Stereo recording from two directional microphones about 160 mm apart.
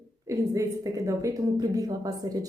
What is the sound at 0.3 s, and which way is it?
A woman's voice, 20° right (ahead or behind).